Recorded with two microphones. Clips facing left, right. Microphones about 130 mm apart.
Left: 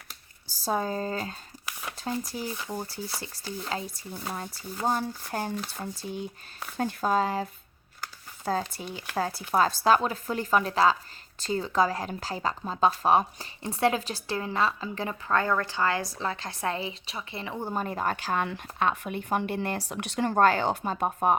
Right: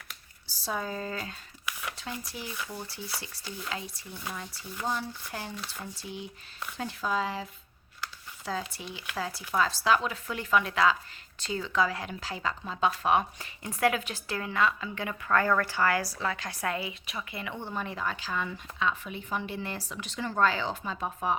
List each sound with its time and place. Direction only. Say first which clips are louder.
0.6 s a woman's voice: left 5 dB; 35° left (ahead or behind)